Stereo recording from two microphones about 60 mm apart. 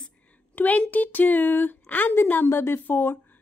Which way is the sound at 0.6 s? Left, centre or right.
Left.